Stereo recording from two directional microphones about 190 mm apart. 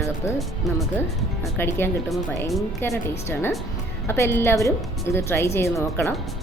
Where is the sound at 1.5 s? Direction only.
10° left (ahead or behind).